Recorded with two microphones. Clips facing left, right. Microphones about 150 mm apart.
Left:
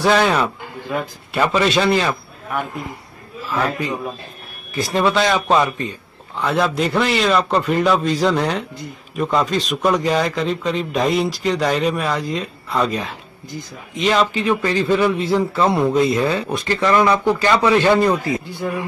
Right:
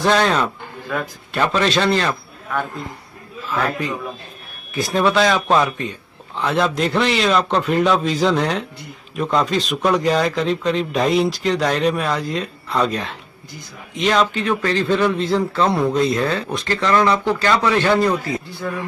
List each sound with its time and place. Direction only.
0.0 s a man's voice: 10° left (ahead or behind)
4.7 s a man's voice: centre (ahead or behind)